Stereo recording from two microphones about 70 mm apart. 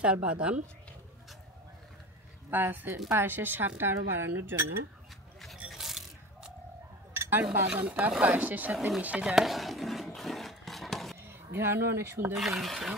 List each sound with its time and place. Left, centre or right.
0.0 s speech: centre
2.5 s a woman's voice: right
5.4 s a sound: centre
7.2 s speech: right
8.7 s speech: centre
9.0 s speech: centre
9.3 s a sound: centre
11.2 s speech: right
12.4 s speech: centre